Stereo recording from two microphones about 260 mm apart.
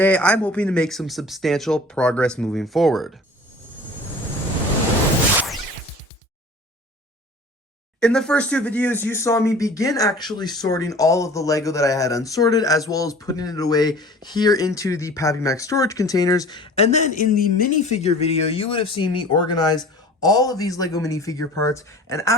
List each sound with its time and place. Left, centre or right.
0.0 s speech: centre
8.0 s speech: centre